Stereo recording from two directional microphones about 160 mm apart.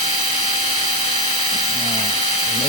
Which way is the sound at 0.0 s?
40° left (ahead or behind).